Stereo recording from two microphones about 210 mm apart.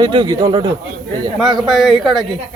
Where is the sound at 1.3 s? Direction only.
Centre (ahead or behind).